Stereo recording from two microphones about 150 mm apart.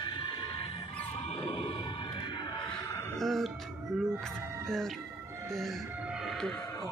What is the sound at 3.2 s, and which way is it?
Music, centre (ahead or behind).